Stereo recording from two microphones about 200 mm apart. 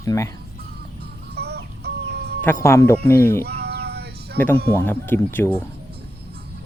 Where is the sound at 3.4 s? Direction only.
55° right (ahead or behind).